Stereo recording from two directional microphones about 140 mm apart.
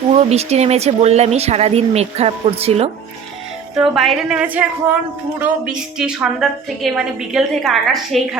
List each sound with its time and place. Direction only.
0.2 s speech: 50° right (ahead or behind)
3.8 s a woman's voice: 5° right (ahead or behind)